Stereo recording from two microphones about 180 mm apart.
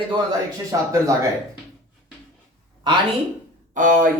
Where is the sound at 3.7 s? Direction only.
45° right (ahead or behind).